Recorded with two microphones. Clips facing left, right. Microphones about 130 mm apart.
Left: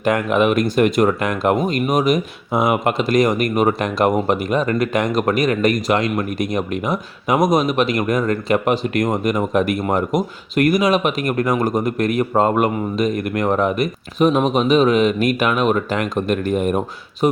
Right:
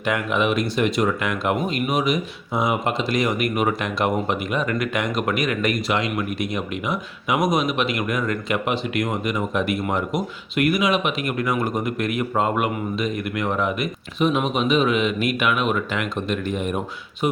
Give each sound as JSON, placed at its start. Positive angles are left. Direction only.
{"t": 0.0, "sound": "speech", "side_deg": 45}